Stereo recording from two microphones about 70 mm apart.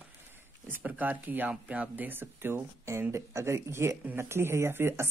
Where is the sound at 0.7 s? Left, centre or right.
Right.